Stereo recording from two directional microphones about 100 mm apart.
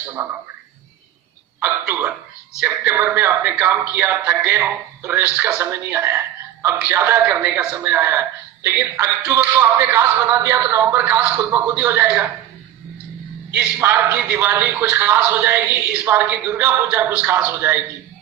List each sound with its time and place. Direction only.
0.2 s speech: 30° right (ahead or behind)
1.6 s a man's voice: 20° right (ahead or behind)
7.9 s speech: 20° right (ahead or behind)
13.7 s a man's voice: 20° right (ahead or behind)